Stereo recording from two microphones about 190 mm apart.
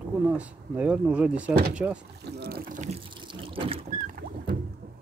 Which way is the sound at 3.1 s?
25° right (ahead or behind).